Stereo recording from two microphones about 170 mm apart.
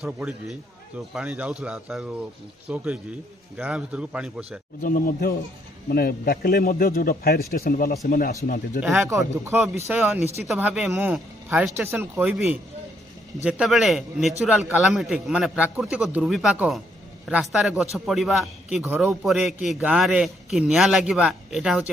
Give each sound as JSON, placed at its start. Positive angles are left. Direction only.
{"t": 0.0, "sound": "a man's voice", "side_deg": -5}
{"t": 4.8, "sound": "a man's voice", "side_deg": 60}
{"t": 9.0, "sound": "a man's voice", "side_deg": -15}